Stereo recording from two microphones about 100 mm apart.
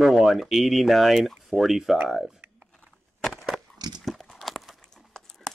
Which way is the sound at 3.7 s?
45° right (ahead or behind).